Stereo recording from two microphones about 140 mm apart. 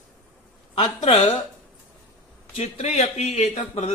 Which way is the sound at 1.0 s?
55° left (ahead or behind).